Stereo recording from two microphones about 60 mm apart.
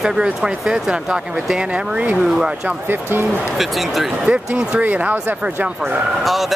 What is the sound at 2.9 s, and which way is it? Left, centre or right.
Speech, right.